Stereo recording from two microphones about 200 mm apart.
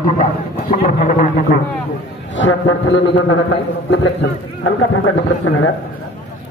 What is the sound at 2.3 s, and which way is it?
A man's voice, 65° left (ahead or behind).